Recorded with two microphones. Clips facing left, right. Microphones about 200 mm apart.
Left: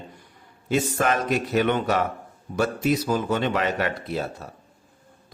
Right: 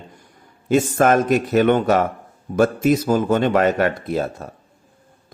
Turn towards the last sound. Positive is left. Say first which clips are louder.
# right 6 dB
turn(degrees=-50)  # may be behind; listen again after turning